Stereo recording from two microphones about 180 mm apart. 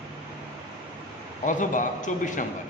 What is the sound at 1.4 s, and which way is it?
A man's voice, 45° left (ahead or behind).